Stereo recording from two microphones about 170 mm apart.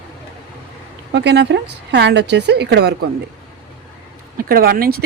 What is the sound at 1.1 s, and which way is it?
A woman's voice, 85° right.